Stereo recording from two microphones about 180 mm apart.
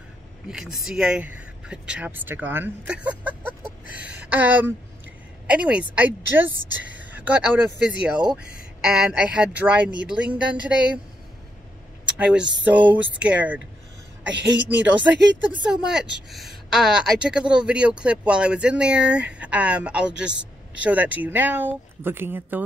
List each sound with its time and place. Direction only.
0.5 s a woman's voice: 5° right (ahead or behind)
12.2 s a woman's voice: 5° right (ahead or behind)
14.3 s a woman's voice: 80° right
15.5 s a woman's voice: 5° right (ahead or behind)